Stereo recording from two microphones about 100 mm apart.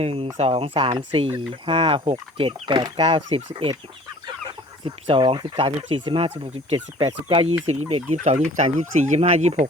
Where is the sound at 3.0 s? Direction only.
80° right; by 3.7 s 65° right (ahead or behind).